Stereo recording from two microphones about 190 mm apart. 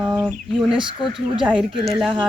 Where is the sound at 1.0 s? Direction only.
5° right (ahead or behind).